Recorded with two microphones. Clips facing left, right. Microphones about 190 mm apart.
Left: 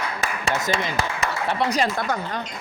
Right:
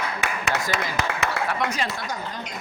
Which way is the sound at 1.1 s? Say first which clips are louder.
Right 1 dB; 70° right (ahead or behind).